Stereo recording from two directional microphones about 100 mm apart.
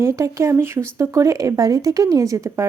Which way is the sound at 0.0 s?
30° right (ahead or behind).